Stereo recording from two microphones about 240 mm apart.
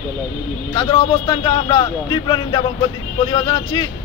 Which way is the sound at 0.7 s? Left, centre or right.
Centre.